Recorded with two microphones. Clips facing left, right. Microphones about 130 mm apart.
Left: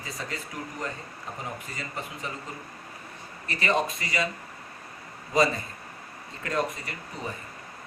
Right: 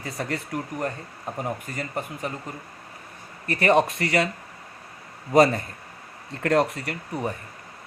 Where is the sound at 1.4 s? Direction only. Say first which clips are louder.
Right 7 dB; 55° right (ahead or behind).